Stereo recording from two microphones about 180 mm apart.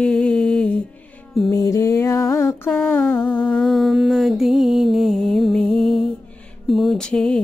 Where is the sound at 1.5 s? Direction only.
15° left (ahead or behind).